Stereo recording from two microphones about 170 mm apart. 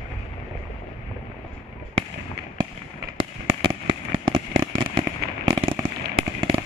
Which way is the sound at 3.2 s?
30° right (ahead or behind).